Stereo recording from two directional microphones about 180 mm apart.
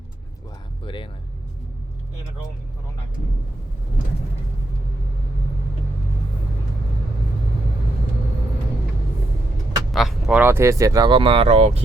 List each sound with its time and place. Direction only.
9.9 s speech: centre (ahead or behind); by 11.8 s 35° right (ahead or behind)